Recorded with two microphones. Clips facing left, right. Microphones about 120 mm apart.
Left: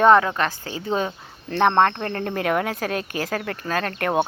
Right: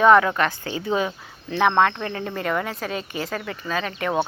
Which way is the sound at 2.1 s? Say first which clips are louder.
Left 3 dB; 60° left (ahead or behind).